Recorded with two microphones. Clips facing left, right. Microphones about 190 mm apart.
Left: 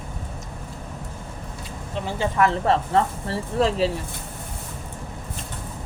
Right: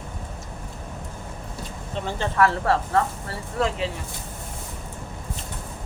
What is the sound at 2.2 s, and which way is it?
Speech, 20° left (ahead or behind).